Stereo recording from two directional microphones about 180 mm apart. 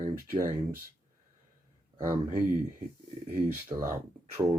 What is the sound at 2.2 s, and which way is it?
Speech, 50° right (ahead or behind).